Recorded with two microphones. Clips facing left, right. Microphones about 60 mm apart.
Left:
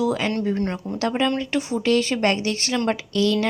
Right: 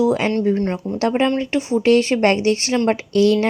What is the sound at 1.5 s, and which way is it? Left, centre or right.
Speech, centre.